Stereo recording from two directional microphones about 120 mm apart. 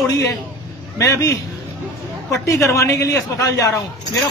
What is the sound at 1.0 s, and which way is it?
A man's voice, 25° left (ahead or behind).